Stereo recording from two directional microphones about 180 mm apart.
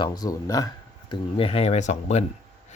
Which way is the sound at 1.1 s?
30° left (ahead or behind).